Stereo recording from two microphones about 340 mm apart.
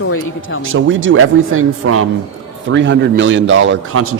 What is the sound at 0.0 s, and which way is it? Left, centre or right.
Speech, left.